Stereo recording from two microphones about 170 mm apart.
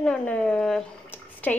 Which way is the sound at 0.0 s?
5° left (ahead or behind).